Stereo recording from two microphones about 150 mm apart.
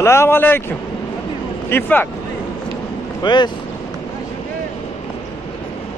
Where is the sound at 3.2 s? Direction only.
30° left (ahead or behind).